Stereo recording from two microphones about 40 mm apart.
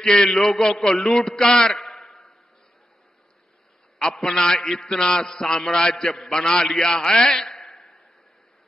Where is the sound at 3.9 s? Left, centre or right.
Centre.